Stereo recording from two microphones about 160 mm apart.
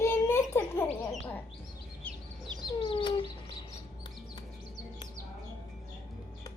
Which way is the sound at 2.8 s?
30° left (ahead or behind).